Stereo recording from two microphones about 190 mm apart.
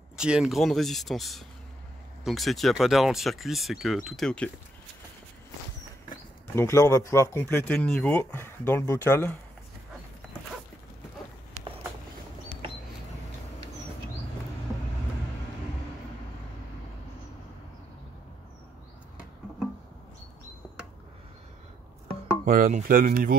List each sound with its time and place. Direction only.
0.2 s speech: 5° right (ahead or behind)
6.5 s speech: 15° left (ahead or behind)
11.6 s a sound: 15° left (ahead or behind)
22.4 s speech: 45° right (ahead or behind)